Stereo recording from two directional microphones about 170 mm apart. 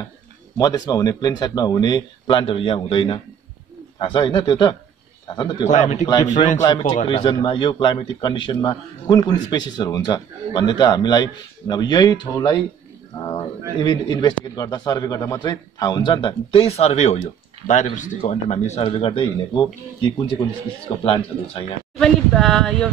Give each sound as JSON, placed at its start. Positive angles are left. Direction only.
{"t": 0.6, "sound": "a man's voice", "side_deg": 20}
{"t": 5.7, "sound": "a man's voice", "side_deg": 45}
{"t": 6.6, "sound": "a man's voice", "side_deg": 25}
{"t": 22.0, "sound": "speech", "side_deg": 5}